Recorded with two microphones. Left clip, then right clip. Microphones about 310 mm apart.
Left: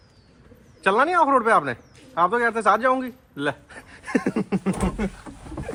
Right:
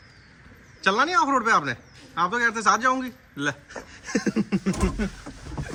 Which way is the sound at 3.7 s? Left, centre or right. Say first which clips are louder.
Left 3 dB; centre.